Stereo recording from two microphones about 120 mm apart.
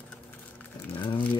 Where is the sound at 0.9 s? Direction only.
45° left (ahead or behind).